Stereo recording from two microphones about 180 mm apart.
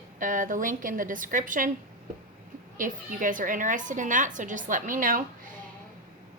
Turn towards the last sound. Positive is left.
turn(degrees=-50)  # may be behind; listen again after turning